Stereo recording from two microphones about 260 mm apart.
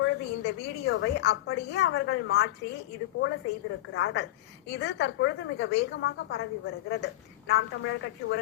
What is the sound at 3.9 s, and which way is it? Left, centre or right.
A woman's voice, left.